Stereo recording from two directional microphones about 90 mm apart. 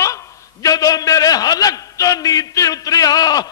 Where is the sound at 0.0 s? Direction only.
35° left (ahead or behind).